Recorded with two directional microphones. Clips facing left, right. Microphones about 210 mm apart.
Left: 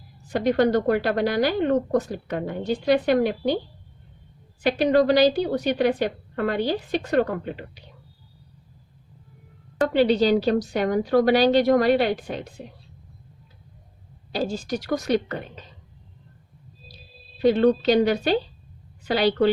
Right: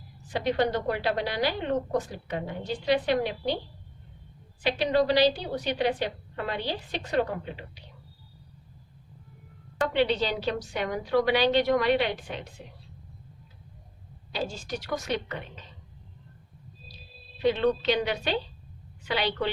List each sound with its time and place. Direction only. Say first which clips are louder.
0.3 s a woman's voice: left 6 dB; 45° left (ahead or behind)
4.6 s a woman's voice: left 6 dB; 50° left (ahead or behind)
9.8 s a woman's voice: left 7 dB; 40° left (ahead or behind)
14.3 s a woman's voice: left 7 dB; 40° left (ahead or behind)
17.4 s a woman's voice: left 6 dB; 40° left (ahead or behind)